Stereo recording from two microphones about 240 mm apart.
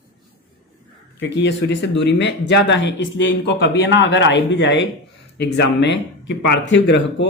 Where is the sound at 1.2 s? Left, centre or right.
Left.